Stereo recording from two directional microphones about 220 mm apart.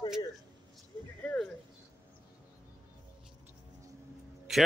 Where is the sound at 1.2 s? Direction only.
5° left (ahead or behind).